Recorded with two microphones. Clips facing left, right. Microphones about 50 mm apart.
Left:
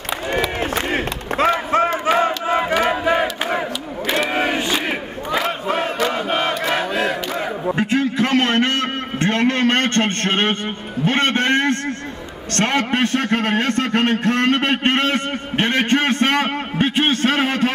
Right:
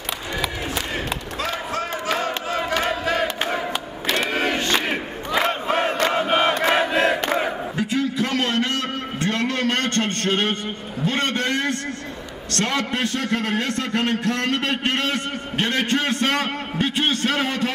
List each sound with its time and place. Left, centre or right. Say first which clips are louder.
0.9 s crowd: left 6 dB; left; by 3.6 s centre
4.1 s battle cry: left 2 dB; centre
6.0 s crowd: right 3 dB; centre
6.8 s battle cry: right 1 dB; centre
7.7 s a sound: left 7 dB; left